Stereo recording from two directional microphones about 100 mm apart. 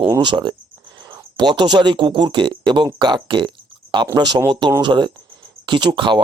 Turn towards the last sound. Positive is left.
turn(degrees=-50)  # may be behind; listen again after turning